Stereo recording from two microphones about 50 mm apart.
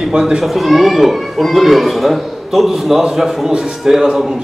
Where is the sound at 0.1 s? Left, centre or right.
Centre.